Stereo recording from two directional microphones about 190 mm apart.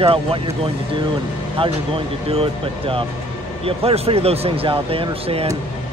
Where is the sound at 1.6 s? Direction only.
30° right (ahead or behind).